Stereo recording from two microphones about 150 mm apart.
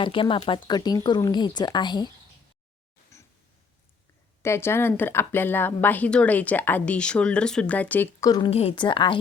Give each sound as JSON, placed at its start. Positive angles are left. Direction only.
{"t": 0.0, "sound": "speech", "side_deg": 35}
{"t": 3.1, "sound": "a sound", "side_deg": 20}
{"t": 4.4, "sound": "a woman's voice", "side_deg": 15}
{"t": 8.4, "sound": "speech", "side_deg": 40}